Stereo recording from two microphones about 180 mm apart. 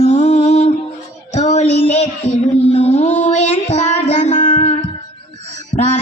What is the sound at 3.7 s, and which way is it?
Child singing, 40° left (ahead or behind).